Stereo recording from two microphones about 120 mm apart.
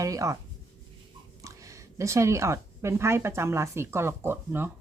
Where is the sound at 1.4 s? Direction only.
25° right (ahead or behind).